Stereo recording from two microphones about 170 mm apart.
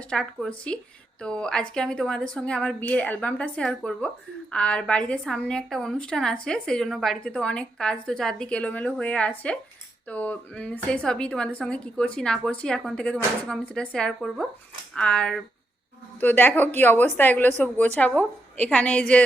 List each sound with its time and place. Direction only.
0.0 s a woman's voice: 5° left (ahead or behind)